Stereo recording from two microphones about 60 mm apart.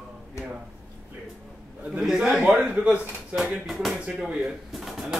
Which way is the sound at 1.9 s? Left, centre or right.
Centre.